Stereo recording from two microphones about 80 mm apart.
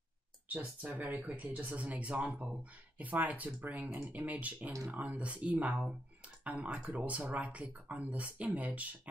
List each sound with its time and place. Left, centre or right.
0.5 s speech: centre